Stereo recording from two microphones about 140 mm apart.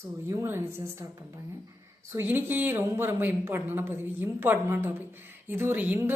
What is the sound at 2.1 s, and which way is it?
Speech, 15° right (ahead or behind).